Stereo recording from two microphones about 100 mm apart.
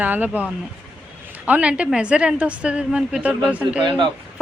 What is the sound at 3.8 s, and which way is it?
Speech, 55° right (ahead or behind).